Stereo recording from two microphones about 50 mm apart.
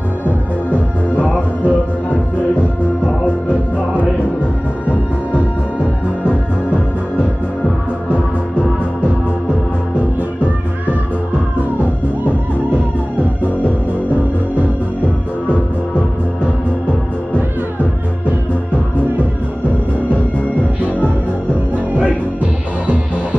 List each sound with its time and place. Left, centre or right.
0.7 s music: left